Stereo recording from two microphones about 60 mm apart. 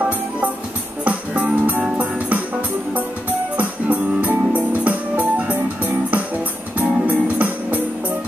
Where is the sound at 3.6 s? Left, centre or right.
Right.